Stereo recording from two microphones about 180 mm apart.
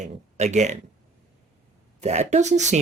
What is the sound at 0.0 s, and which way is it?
Speech, 40° right (ahead or behind).